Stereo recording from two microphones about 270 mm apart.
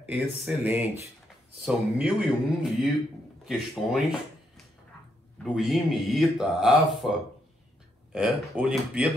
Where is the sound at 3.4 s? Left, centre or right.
Centre.